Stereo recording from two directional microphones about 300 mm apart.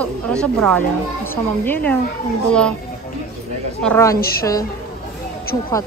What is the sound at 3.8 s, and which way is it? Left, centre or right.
Speech, centre.